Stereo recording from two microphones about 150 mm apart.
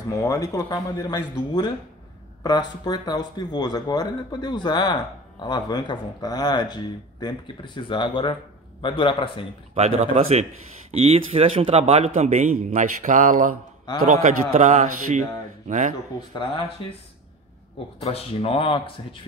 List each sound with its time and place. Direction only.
0.1 s speech: 20° left (ahead or behind)
9.8 s a man's voice: 45° right (ahead or behind)
18.0 s speech: 40° left (ahead or behind)